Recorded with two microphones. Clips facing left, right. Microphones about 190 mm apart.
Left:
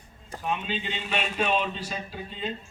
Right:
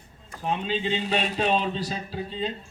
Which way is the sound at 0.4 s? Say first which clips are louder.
Right 4 dB; 35° right (ahead or behind).